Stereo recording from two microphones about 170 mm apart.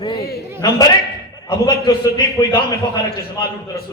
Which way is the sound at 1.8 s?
20° left (ahead or behind).